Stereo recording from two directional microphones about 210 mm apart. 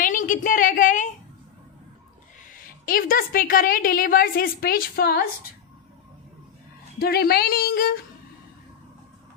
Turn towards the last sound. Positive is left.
turn(degrees=45)  # may be behind; listen again after turning